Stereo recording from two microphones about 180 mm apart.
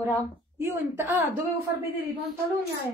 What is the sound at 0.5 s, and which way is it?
Speech, 15° right (ahead or behind).